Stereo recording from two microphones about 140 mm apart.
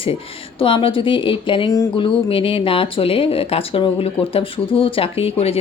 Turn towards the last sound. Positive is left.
turn(degrees=45)  # may be behind; listen again after turning